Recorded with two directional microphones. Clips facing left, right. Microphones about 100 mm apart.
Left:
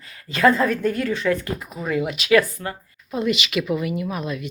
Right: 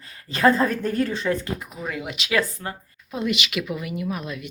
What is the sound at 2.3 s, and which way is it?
Speech, 25° right (ahead or behind).